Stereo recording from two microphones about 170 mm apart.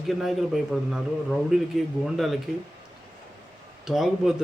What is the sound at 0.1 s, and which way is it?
Speech, centre (ahead or behind).